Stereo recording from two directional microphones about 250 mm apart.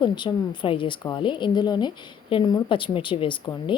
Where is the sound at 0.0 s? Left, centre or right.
Centre.